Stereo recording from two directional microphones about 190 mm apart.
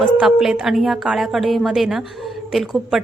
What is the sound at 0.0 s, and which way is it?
A woman's voice, centre (ahead or behind).